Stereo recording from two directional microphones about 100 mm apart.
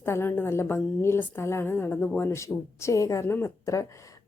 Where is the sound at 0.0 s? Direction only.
25° left (ahead or behind).